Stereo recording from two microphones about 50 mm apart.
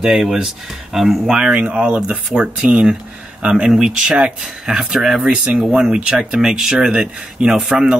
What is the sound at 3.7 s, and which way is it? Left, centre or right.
Speech, centre.